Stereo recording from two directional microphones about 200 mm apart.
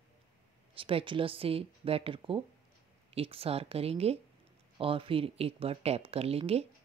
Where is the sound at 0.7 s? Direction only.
25° right (ahead or behind).